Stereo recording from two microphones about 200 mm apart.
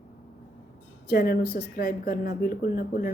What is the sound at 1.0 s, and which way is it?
Speech, 50° left (ahead or behind).